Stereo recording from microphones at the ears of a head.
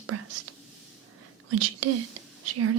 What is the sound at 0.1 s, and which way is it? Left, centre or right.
Whispering, right.